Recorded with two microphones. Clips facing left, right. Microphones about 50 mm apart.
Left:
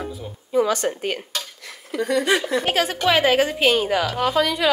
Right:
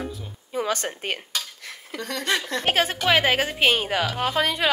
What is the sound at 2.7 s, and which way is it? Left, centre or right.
A woman's voice, right.